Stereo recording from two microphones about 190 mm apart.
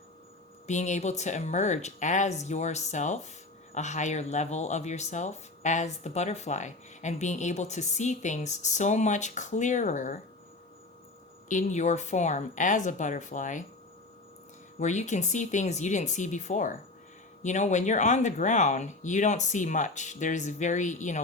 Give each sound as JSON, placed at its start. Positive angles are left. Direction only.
{"t": 0.7, "sound": "speech", "side_deg": 40}
{"t": 11.4, "sound": "speech", "side_deg": 40}
{"t": 14.8, "sound": "speech", "side_deg": 40}